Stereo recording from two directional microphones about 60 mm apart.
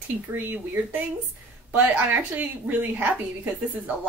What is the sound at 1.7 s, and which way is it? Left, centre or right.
A woman's voice, right.